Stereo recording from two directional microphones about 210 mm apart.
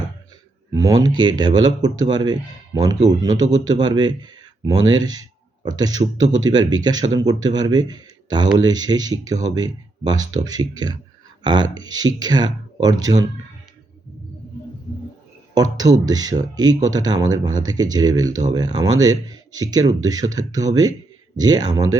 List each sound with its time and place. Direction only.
0.7 s speech: 15° right (ahead or behind)
15.8 s speech: 20° right (ahead or behind)